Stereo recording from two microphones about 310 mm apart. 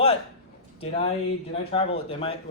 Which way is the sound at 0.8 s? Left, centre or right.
Centre.